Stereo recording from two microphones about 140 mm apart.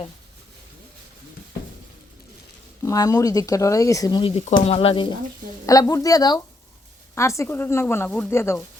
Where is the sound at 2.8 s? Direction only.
25° left (ahead or behind).